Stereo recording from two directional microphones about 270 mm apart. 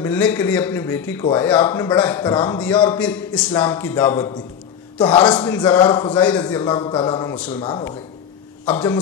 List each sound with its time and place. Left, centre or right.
0.0 s a man's voice: centre
8.6 s a man's voice: centre